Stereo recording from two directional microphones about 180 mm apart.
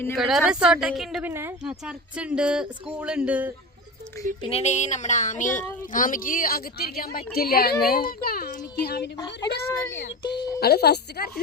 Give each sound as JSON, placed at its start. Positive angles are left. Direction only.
{"t": 0.2, "sound": "a woman's voice", "side_deg": 0}
{"t": 4.4, "sound": "a sound", "side_deg": 35}
{"t": 5.9, "sound": "a woman's voice", "side_deg": 50}